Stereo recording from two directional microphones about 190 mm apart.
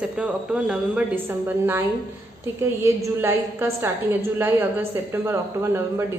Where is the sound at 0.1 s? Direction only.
5° right (ahead or behind).